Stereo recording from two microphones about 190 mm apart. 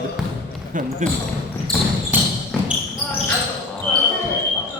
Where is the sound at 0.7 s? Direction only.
40° right (ahead or behind).